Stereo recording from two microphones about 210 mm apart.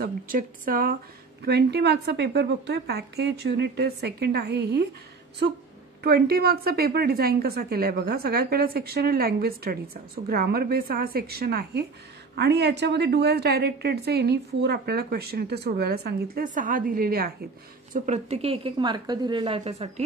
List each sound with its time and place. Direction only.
0.0 s a woman's voice: 40° right (ahead or behind)
17.9 s a woman's voice: 35° right (ahead or behind)